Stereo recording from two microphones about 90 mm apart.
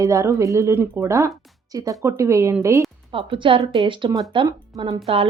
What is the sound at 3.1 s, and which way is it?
Speech, 90° right.